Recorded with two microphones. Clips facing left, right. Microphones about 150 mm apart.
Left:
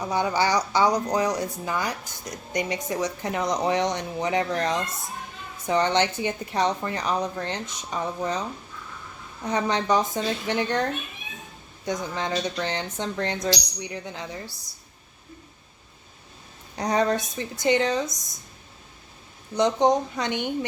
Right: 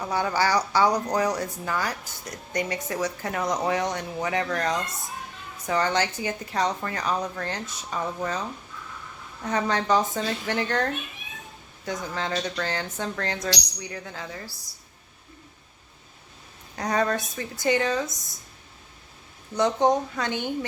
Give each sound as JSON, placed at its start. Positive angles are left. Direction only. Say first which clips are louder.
{"t": 0.0, "sound": "a woman's voice", "louder": "left 1 dB", "side_deg": 15}
{"t": 9.4, "sound": "speech", "louder": "left 1 dB", "side_deg": 15}
{"t": 11.9, "sound": "a woman's voice", "louder": "left 2 dB", "side_deg": 20}
{"t": 16.7, "sound": "a woman's voice", "louder": "left 2 dB", "side_deg": 20}
{"t": 19.5, "sound": "speech", "louder": "left 1 dB", "side_deg": 15}